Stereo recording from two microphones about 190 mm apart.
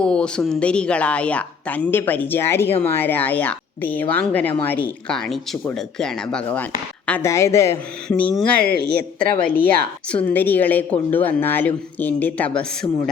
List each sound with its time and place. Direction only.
0.0 s speech: 5° left (ahead or behind)
8.9 s speech: 55° right (ahead or behind)
10.1 s speech: 5° left (ahead or behind)